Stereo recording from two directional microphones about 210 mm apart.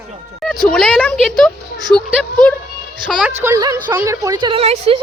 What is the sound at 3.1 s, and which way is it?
A woman's voice, 5° right (ahead or behind).